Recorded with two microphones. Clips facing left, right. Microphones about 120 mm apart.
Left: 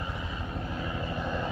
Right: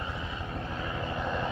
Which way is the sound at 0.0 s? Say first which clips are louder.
Even; 30° left (ahead or behind).